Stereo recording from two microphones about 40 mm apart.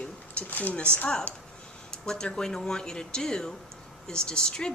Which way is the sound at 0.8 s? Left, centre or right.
Left.